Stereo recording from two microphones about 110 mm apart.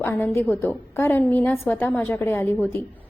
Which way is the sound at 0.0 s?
20° left (ahead or behind).